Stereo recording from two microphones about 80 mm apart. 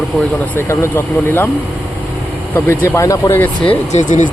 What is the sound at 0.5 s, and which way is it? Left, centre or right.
Speech, left.